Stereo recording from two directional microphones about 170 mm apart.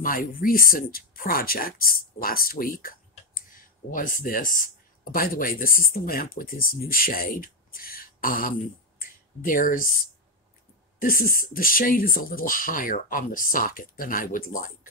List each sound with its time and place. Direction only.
0.0 s speech: 55° left (ahead or behind)
11.0 s speech: 55° left (ahead or behind)